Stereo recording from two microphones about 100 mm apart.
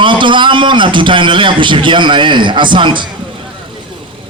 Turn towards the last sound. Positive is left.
turn(degrees=-50)  # may be behind; listen again after turning